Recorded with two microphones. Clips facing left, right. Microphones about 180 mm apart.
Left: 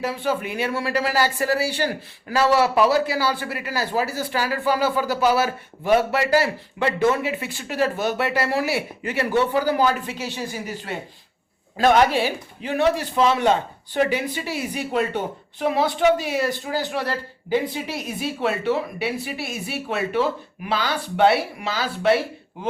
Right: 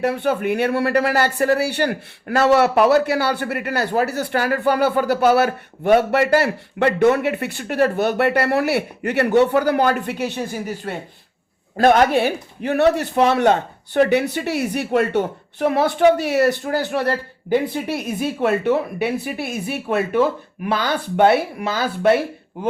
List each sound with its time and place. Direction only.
0.0 s speech: 60° right (ahead or behind)